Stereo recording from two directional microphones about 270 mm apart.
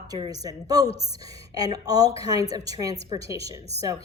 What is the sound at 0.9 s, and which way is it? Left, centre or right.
Speech, left.